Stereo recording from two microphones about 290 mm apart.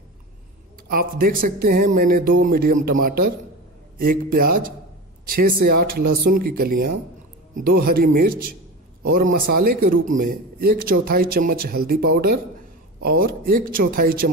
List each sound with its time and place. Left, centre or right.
0.8 s speech: right